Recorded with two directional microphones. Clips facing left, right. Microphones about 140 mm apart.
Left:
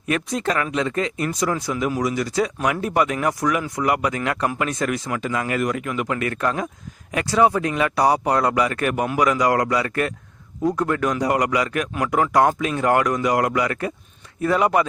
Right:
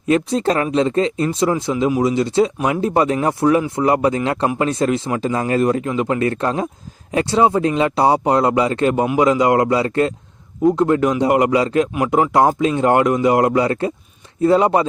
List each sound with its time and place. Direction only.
0.0 s a man's voice: 30° right (ahead or behind)